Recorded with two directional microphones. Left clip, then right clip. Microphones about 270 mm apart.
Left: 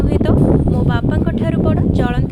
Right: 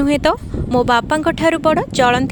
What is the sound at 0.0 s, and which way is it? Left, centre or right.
Speech, right.